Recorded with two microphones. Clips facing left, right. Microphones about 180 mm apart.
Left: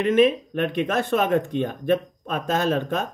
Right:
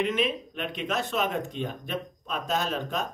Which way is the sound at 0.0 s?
55° left (ahead or behind).